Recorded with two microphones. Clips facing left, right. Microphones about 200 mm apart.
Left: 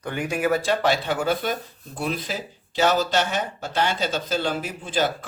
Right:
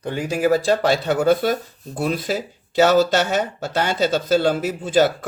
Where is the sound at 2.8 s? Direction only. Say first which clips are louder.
Right 6 dB; 45° right (ahead or behind).